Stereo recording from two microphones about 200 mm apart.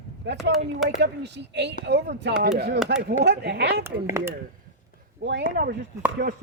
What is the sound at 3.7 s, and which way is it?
Speech, 10° right (ahead or behind).